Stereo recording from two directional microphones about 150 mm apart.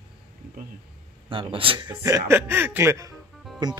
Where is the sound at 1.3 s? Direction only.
35° right (ahead or behind).